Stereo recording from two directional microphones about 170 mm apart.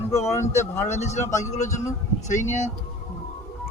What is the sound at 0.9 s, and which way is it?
Speech, 40° left (ahead or behind).